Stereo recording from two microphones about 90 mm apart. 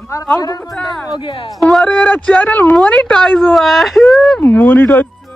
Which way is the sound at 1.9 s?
15° left (ahead or behind).